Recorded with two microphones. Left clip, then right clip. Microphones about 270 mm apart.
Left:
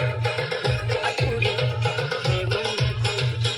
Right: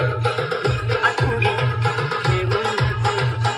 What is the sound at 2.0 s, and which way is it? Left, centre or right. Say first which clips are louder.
Music: right 4 dB; centre.